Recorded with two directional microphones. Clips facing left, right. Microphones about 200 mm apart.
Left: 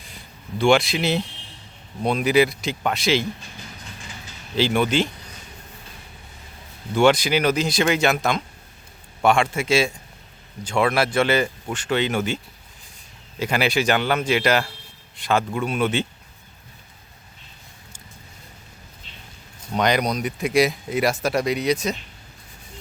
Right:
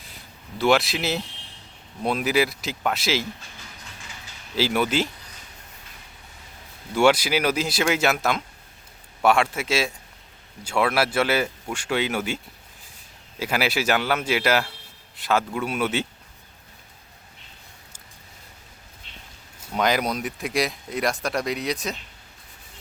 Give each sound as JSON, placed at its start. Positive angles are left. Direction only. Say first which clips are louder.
{"t": 0.6, "sound": "speech", "louder": "left 3 dB", "side_deg": 0}
{"t": 4.5, "sound": "speech", "louder": "left 3 dB", "side_deg": -5}
{"t": 6.9, "sound": "speech", "louder": "left 2 dB", "side_deg": -10}
{"t": 13.4, "sound": "a man's voice", "louder": "left 3 dB", "side_deg": -5}
{"t": 19.7, "sound": "speech", "louder": "left 2 dB", "side_deg": -5}